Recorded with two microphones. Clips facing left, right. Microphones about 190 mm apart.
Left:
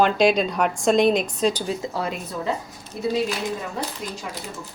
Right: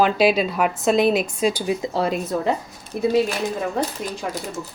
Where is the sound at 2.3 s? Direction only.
55° right (ahead or behind).